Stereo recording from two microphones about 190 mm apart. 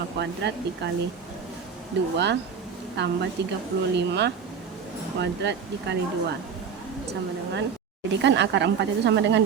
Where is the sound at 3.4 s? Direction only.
65° right (ahead or behind).